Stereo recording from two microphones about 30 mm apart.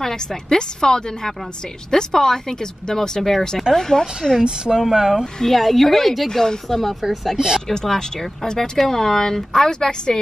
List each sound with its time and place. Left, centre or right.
0.0 s a woman's voice: centre
3.2 s a woman's voice: centre
3.7 s speech: centre
4.9 s speech: centre
5.5 s a woman's voice: centre
6.2 s speech: centre
6.8 s a woman's voice: centre
7.3 s speech: right
7.6 s speech: centre